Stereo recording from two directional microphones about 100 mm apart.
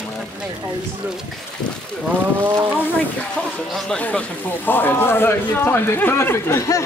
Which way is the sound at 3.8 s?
10° left (ahead or behind).